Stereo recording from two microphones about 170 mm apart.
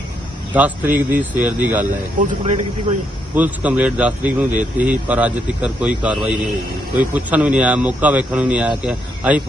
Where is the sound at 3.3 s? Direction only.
10° right (ahead or behind).